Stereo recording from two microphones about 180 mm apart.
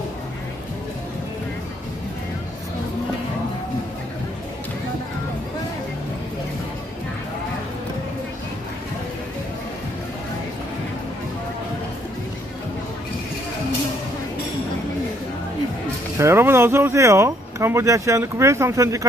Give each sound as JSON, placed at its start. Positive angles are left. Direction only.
{"t": 16.1, "sound": "speech", "side_deg": -15}